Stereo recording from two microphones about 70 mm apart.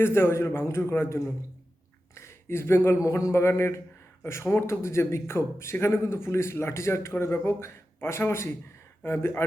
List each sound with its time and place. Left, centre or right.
0.0 s speech: left